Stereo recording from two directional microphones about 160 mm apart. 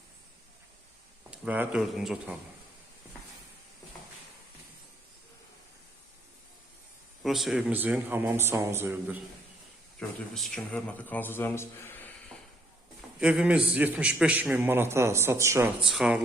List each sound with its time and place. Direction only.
1.3 s speech: 10° right (ahead or behind)
7.2 s speech: centre (ahead or behind)
10.0 s a man's voice: centre (ahead or behind)
13.1 s a man's voice: 5° right (ahead or behind)
15.8 s speech: 5° right (ahead or behind)